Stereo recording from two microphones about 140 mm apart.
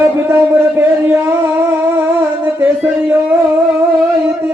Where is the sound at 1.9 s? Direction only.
15° right (ahead or behind).